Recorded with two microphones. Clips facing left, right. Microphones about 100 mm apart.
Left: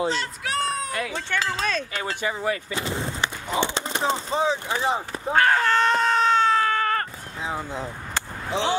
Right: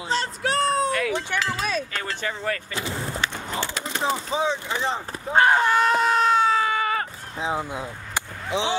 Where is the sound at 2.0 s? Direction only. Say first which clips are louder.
Left 2 dB; 15° left (ahead or behind).